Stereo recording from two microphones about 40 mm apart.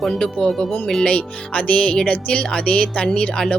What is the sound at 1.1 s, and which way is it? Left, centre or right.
Speech, left.